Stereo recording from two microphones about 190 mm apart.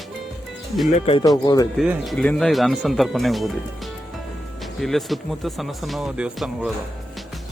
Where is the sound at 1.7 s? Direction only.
Centre (ahead or behind).